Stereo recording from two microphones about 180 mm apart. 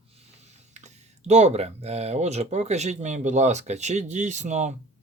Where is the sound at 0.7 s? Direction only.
40° right (ahead or behind).